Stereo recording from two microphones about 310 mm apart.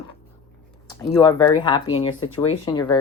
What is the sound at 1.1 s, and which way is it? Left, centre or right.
Speech, centre.